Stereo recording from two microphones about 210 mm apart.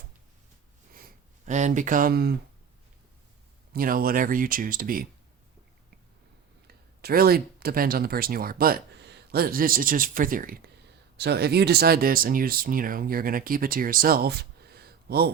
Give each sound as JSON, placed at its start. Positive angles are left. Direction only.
{"t": 0.9, "sound": "a sound", "side_deg": -40}
{"t": 3.7, "sound": "speech", "side_deg": -40}
{"t": 6.7, "sound": "speech", "side_deg": -45}